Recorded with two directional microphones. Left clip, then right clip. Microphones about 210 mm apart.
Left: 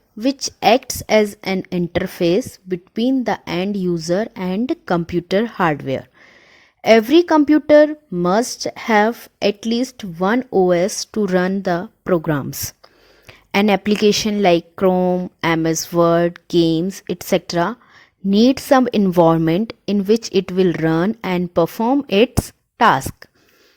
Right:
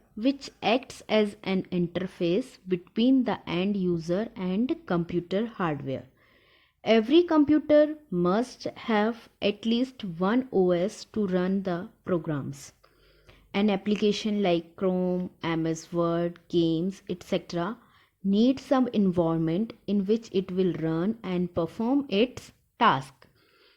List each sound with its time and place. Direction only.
0.2 s a woman's voice: 40° left (ahead or behind)